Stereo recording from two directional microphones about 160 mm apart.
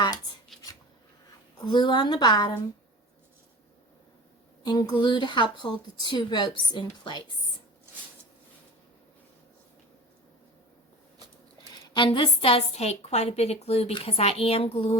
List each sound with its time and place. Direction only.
0.5 s writing: centre (ahead or behind)
1.6 s speech: 30° left (ahead or behind)
4.6 s speech: 25° left (ahead or behind)
11.6 s a woman's voice: 30° left (ahead or behind)